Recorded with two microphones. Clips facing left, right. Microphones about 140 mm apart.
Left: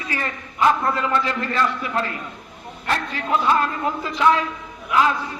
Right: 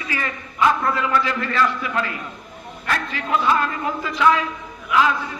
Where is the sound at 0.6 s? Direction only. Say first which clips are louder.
Even; 35° left (ahead or behind).